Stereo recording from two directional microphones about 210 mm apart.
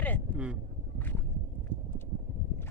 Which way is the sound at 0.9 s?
10° left (ahead or behind).